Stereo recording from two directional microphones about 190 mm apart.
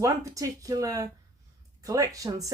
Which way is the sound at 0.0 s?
15° right (ahead or behind).